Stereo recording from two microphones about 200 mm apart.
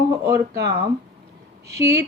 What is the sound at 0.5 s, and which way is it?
Speech, 55° right (ahead or behind).